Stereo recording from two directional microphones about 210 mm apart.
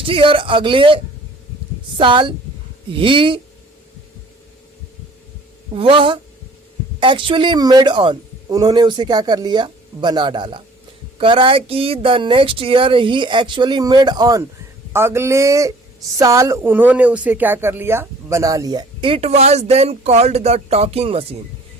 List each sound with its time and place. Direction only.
0.0 s a man's voice: 25° right (ahead or behind)
5.7 s a man's voice: 25° right (ahead or behind)